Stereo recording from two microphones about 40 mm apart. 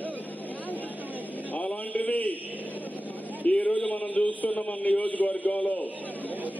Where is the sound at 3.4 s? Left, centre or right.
Left.